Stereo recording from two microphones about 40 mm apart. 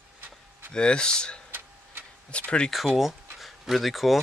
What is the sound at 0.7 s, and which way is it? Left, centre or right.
Speech, left.